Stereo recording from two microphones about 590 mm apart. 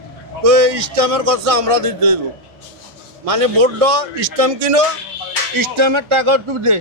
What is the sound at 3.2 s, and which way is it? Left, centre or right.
Music, right.